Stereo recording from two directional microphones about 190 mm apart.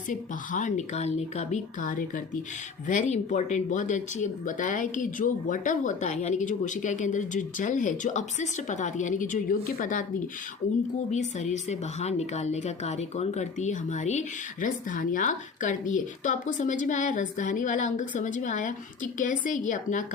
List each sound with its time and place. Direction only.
0.1 s a woman's voice: 40° left (ahead or behind)
11.1 s a woman's voice: 40° left (ahead or behind)